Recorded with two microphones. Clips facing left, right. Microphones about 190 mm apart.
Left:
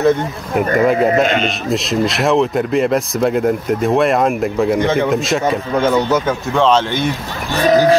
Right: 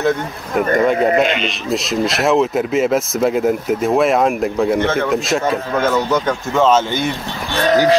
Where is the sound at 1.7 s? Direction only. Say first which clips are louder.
Even; centre (ahead or behind).